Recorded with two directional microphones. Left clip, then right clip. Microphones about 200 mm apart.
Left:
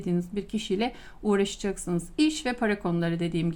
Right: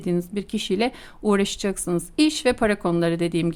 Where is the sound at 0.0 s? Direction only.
35° right (ahead or behind).